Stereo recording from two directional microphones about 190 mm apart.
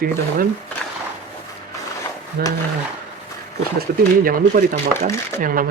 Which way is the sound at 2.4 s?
50° right (ahead or behind).